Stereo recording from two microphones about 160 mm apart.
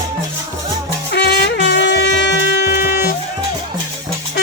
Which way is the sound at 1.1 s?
90° left.